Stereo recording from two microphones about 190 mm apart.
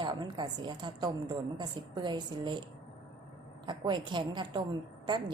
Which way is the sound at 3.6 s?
25° right (ahead or behind).